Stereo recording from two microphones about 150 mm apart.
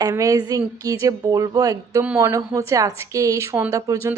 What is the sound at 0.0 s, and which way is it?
A woman's voice, 20° right (ahead or behind).